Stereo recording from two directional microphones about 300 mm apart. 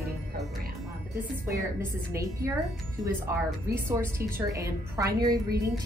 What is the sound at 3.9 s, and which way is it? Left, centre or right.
A woman's voice, centre.